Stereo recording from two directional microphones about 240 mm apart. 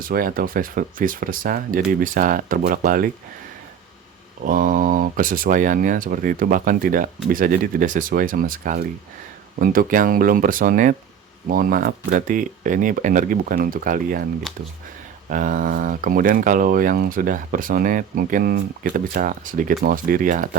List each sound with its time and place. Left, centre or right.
0.0 s speech: right
4.4 s speech: right
15.3 s speech: right